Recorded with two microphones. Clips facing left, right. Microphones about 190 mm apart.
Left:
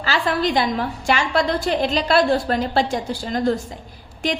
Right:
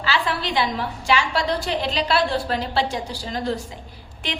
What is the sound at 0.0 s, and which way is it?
A woman's voice, 45° left (ahead or behind).